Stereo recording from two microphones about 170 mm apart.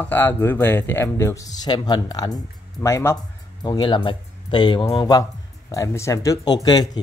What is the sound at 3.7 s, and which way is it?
Speech, 25° left (ahead or behind).